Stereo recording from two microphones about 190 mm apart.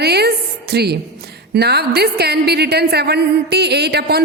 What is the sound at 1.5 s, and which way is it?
A woman's voice, 60° right (ahead or behind).